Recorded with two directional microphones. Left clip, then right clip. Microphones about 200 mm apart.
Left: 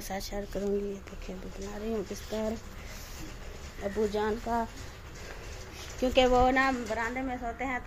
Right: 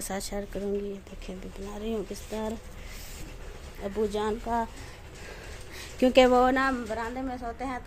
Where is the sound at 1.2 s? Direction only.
15° right (ahead or behind).